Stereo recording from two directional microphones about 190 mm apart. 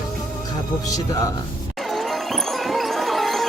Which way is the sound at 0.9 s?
20° left (ahead or behind).